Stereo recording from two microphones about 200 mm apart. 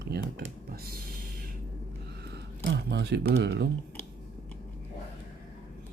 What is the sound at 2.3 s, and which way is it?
Speech, 55° right (ahead or behind).